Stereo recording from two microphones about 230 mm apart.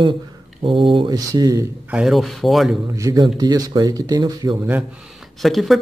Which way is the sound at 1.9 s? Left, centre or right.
Centre.